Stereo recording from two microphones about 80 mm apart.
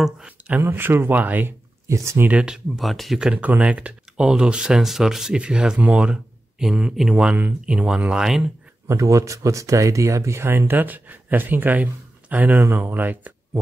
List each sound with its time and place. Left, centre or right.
0.5 s speech: right
1.9 s speech: right
2.2 s speech: centre
2.8 s speech: centre
3.2 s speech: centre
8.8 s speech: right